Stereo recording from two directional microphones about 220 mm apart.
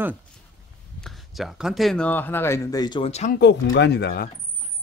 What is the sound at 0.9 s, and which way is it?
Speech, centre (ahead or behind).